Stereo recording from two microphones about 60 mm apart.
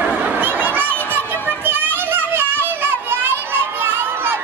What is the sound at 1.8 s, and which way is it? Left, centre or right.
Children playing, right.